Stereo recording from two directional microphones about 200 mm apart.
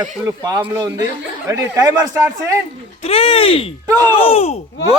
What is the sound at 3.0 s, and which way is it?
Speech, 30° left (ahead or behind).